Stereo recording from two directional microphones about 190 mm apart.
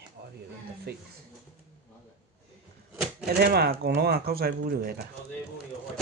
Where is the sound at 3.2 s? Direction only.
55° right (ahead or behind).